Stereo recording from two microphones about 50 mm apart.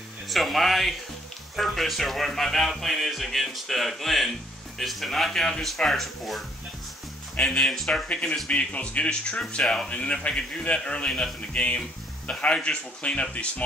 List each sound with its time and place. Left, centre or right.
0.3 s speech: centre
7.3 s speech: centre
9.6 s speech: centre
9.8 s speech: left